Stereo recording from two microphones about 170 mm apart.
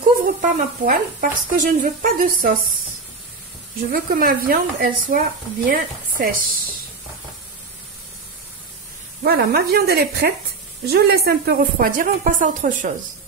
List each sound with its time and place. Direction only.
0.2 s speech: 55° right (ahead or behind)
3.9 s speech: 60° right (ahead or behind)
9.2 s speech: 70° right (ahead or behind); by 12.9 s 50° right (ahead or behind)